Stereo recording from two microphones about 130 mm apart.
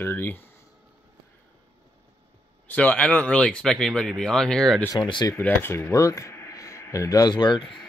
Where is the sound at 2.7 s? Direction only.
10° left (ahead or behind).